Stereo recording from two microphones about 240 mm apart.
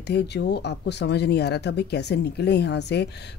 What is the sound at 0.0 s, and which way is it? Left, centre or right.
A woman's voice, left.